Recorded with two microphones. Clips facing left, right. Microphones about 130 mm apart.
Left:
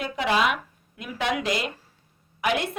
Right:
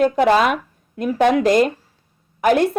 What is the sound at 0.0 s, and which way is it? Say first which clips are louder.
A woman's voice: right 9 dB; 45° right (ahead or behind).